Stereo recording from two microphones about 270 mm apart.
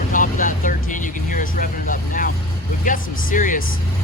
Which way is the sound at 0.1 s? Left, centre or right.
Left.